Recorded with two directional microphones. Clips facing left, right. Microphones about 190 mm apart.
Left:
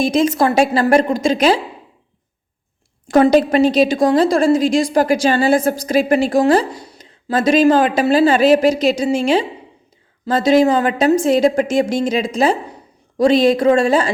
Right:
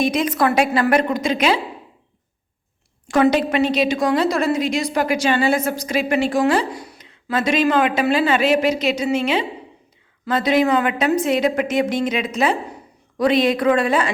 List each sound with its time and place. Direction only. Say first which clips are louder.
0.0 s a woman's voice: left 4 dB; 30° left (ahead or behind)
3.1 s a woman's voice: left 5 dB; 35° left (ahead or behind)